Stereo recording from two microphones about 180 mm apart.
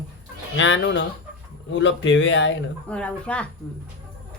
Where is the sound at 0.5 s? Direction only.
90° left.